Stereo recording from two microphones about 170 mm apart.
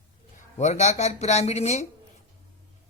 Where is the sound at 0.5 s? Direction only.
40° left (ahead or behind).